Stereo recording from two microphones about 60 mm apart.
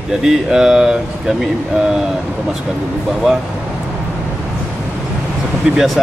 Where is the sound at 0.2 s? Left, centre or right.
Centre.